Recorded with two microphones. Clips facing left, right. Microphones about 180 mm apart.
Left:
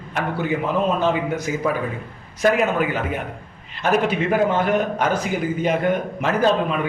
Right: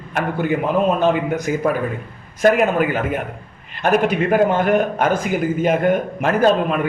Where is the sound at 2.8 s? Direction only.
50° right (ahead or behind).